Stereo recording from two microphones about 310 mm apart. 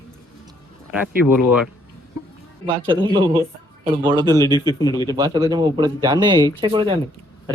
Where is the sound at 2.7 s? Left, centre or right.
Centre.